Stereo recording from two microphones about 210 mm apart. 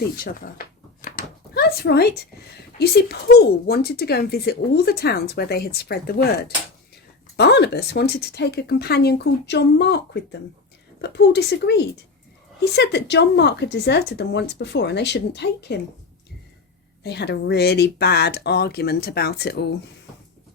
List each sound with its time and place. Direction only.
0.0 s a sound: 45° left (ahead or behind)
2.7 s speech: 50° left (ahead or behind)
7.3 s speech: 50° left (ahead or behind)
17.0 s speech: 50° left (ahead or behind)